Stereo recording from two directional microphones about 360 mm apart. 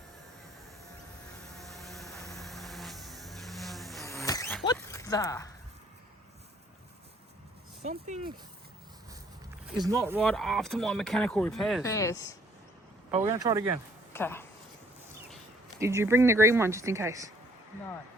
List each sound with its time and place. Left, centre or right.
1.5 s music: centre
7.9 s speech: centre
9.6 s speech: centre
13.1 s speech: centre
14.1 s speech: centre
15.8 s speech: centre